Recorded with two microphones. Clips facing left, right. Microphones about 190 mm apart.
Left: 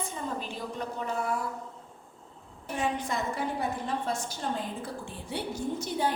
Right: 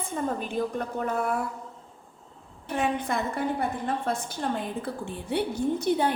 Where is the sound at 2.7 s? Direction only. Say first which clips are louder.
Right 4 dB; 60° right (ahead or behind).